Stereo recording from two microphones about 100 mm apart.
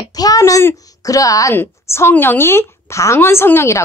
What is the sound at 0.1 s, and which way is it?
A woman's voice, 40° left (ahead or behind).